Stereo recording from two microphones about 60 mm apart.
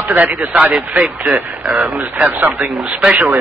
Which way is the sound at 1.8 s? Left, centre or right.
Right.